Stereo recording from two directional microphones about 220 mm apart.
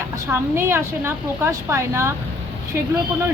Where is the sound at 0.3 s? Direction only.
10° right (ahead or behind).